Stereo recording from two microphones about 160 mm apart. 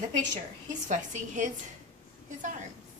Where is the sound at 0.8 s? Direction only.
50° right (ahead or behind).